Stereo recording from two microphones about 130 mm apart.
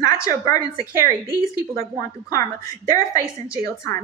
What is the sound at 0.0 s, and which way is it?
Speech, 25° left (ahead or behind).